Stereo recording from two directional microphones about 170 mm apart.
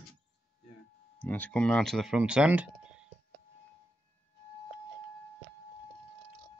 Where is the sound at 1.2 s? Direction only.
10° left (ahead or behind); by 2.7 s 5° right (ahead or behind).